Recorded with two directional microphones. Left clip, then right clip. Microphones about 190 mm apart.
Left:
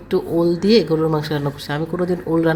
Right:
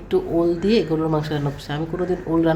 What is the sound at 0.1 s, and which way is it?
A woman's voice, 15° left (ahead or behind).